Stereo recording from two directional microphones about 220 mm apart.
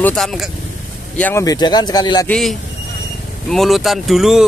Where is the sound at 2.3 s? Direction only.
Centre (ahead or behind).